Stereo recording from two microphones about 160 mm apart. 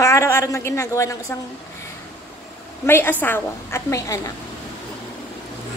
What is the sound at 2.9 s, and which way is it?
A woman's voice, 15° left (ahead or behind).